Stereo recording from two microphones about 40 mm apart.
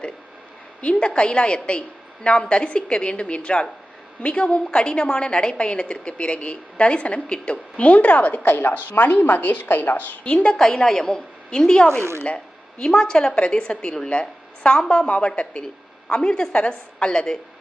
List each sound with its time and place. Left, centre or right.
0.8 s a woman's voice: left
8.5 s a woman's voice: left
10.2 s a woman's voice: left
10.6 s a woman's voice: centre